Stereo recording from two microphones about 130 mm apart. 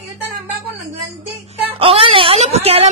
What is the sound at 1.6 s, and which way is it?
Speech, 45° right (ahead or behind).